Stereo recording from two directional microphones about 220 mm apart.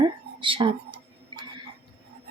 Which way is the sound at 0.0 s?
20° right (ahead or behind).